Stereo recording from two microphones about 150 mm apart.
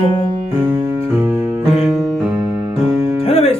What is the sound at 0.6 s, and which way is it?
Music, 15° right (ahead or behind).